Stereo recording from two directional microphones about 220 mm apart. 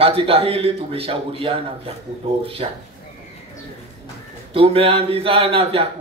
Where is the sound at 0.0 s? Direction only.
25° right (ahead or behind).